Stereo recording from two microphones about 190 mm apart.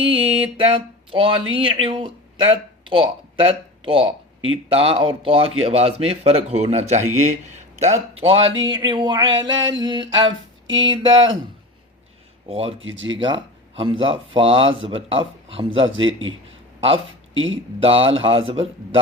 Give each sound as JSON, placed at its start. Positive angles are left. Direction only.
{"t": 0.0, "sound": "a man's voice", "side_deg": -30}
{"t": 12.5, "sound": "a man's voice", "side_deg": -30}
{"t": 12.8, "sound": "speech", "side_deg": -85}
{"t": 13.1, "sound": "speech", "side_deg": -25}
{"t": 16.0, "sound": "a man's voice", "side_deg": -90}
{"t": 17.3, "sound": "a man's voice", "side_deg": -90}
{"t": 17.7, "sound": "speech", "side_deg": -30}